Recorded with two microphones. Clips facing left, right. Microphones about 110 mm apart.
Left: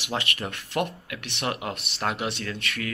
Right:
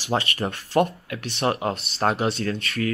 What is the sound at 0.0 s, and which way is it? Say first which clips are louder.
A man's voice: right 5 dB; 35° right (ahead or behind).